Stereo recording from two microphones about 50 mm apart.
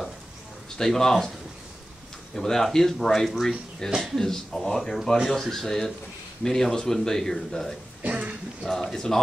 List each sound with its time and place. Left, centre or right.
0.7 s speech: centre
2.3 s speech: centre
8.0 s a sound: right
8.6 s speech: centre